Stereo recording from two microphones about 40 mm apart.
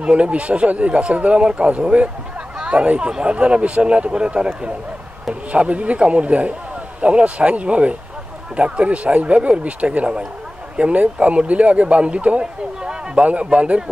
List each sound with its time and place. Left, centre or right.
0.0 s speech: right